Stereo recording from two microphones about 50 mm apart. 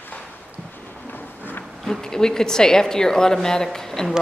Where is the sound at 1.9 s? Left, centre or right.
Centre.